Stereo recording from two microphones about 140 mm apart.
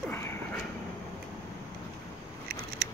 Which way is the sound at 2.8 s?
90° right.